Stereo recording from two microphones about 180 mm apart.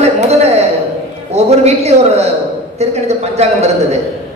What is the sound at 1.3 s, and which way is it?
A man's voice, 35° right (ahead or behind).